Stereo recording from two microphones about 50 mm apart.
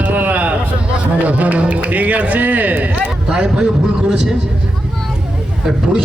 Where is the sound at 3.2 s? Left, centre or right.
Centre.